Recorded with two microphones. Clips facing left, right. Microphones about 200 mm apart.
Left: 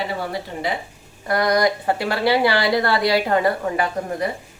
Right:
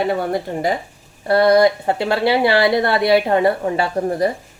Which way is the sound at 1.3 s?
30° right (ahead or behind).